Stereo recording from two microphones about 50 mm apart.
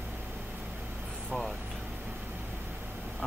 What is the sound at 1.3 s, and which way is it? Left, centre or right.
Vehicle, centre.